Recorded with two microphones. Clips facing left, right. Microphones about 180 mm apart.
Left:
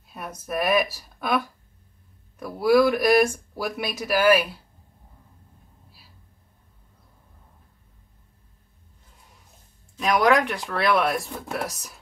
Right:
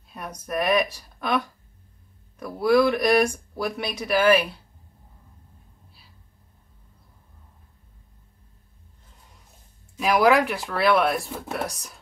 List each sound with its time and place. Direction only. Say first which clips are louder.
0.0 s speech: even; 5° left (ahead or behind)
9.9 s speech: right 1 dB; 5° right (ahead or behind)